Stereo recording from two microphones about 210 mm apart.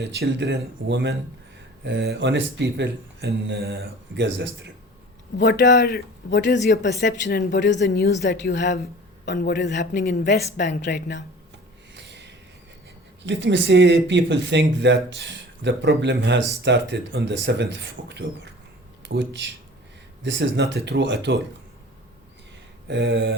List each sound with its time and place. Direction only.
0.0 s speech: 55° right (ahead or behind)
5.4 s a man's voice: 55° left (ahead or behind)
12.0 s a sound: 55° right (ahead or behind)
13.2 s speech: 60° right (ahead or behind)
22.9 s speech: 55° right (ahead or behind)